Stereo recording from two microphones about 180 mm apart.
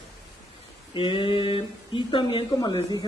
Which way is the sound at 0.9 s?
30° left (ahead or behind).